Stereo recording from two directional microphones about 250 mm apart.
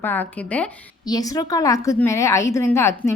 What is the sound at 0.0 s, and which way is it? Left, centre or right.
A woman's voice, centre.